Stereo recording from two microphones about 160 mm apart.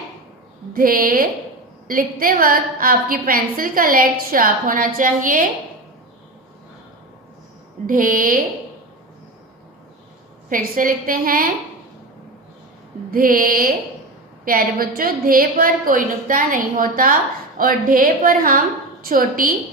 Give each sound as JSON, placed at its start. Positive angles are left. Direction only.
{"t": 0.7, "sound": "a woman's voice", "side_deg": -65}
{"t": 7.9, "sound": "a woman's voice", "side_deg": -60}
{"t": 10.5, "sound": "a woman's voice", "side_deg": -60}
{"t": 13.1, "sound": "a woman's voice", "side_deg": -60}